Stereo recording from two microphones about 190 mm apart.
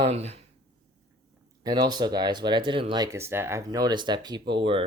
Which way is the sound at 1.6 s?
20° right (ahead or behind).